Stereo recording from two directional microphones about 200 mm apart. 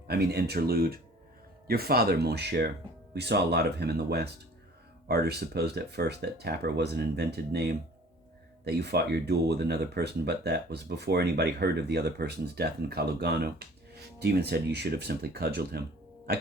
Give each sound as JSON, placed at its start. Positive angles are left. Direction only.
{"t": 0.1, "sound": "speech", "side_deg": -55}